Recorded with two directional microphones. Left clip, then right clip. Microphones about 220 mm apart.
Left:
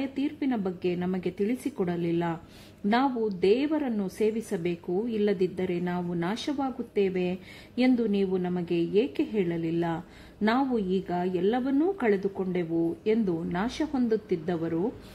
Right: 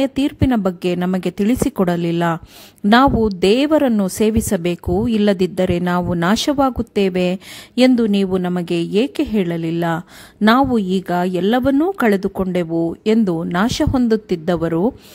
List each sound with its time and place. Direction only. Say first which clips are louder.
0.0 s a woman's voice: right 12 dB; 40° right (ahead or behind)